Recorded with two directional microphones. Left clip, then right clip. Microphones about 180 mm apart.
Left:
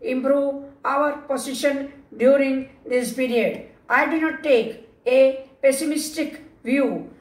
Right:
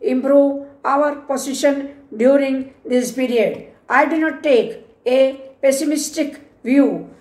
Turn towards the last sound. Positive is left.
turn(degrees=-55)  # may be behind; listen again after turning